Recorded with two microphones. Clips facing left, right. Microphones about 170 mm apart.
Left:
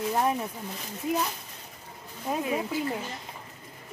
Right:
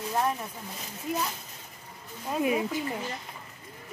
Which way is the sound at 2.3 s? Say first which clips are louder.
Even; 5° left (ahead or behind).